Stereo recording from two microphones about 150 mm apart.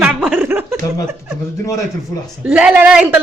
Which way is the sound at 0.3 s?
15° right (ahead or behind).